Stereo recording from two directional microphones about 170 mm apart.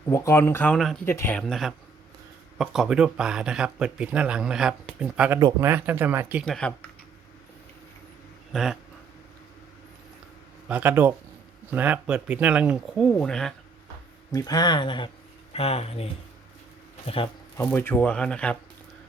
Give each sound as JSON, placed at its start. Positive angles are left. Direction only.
{"t": 0.1, "sound": "speech", "side_deg": 15}
{"t": 5.4, "sound": "speech", "side_deg": -20}
{"t": 6.4, "sound": "speech", "side_deg": 5}
{"t": 8.5, "sound": "speech", "side_deg": 0}
{"t": 10.7, "sound": "speech", "side_deg": -10}
{"t": 14.3, "sound": "speech", "side_deg": 20}
{"t": 17.7, "sound": "speech", "side_deg": 10}